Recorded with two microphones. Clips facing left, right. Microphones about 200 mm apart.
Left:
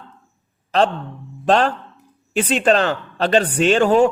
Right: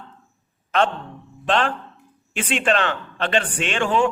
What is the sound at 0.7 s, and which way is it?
A man's voice, 35° left (ahead or behind).